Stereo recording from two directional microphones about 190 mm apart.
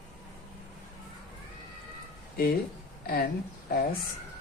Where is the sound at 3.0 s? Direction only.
55° left (ahead or behind).